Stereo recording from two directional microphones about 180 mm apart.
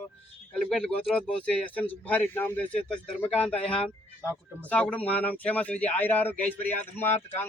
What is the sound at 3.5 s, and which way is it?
Speech, 35° left (ahead or behind).